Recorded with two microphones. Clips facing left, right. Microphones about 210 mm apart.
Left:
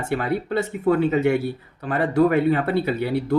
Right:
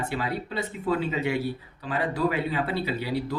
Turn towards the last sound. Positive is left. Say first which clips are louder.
# left 7 dB
turn(degrees=55)  # may be behind; listen again after turning